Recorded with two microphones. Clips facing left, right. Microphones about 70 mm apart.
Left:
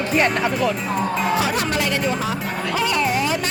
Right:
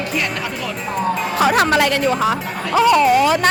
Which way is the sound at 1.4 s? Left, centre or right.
Right.